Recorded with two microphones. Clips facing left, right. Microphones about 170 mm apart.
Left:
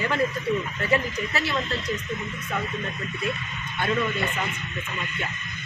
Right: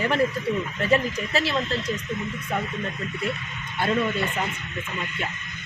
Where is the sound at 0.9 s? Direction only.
25° right (ahead or behind).